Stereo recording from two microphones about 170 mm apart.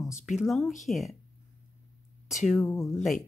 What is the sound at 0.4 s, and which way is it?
Speech, centre (ahead or behind).